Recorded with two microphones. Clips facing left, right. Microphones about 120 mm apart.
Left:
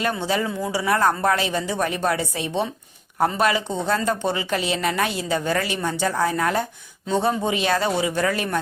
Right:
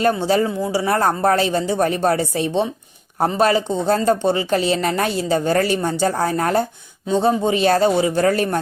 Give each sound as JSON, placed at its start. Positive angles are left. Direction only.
{"t": 0.0, "sound": "speech", "side_deg": -35}
{"t": 7.1, "sound": "speech", "side_deg": -25}